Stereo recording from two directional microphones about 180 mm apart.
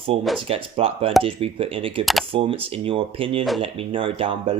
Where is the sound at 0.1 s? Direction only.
30° right (ahead or behind).